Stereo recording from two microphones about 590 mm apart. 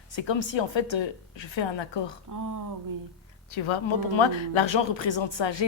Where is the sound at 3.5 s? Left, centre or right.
Left.